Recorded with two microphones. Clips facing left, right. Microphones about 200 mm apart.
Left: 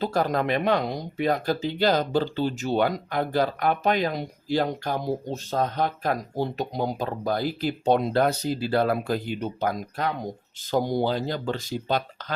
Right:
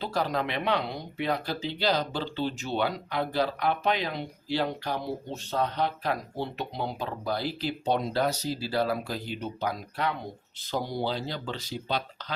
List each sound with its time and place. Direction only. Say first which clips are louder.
0.0 s speech: left 5 dB; 45° left (ahead or behind)